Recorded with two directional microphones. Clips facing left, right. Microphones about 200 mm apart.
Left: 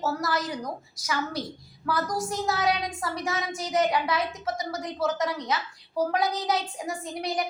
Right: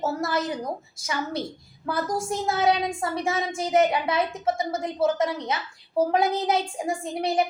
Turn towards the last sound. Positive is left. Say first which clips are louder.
# right 5 dB
turn(degrees=-25)  # may be behind; listen again after turning